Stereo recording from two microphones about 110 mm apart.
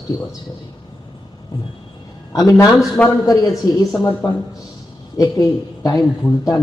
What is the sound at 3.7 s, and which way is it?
Speech, 35° left (ahead or behind).